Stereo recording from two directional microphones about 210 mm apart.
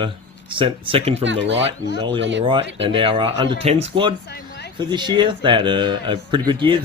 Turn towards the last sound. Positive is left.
turn(degrees=-20)  # may be behind; listen again after turning